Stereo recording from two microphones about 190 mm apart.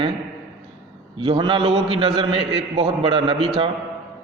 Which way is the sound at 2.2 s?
30° right (ahead or behind).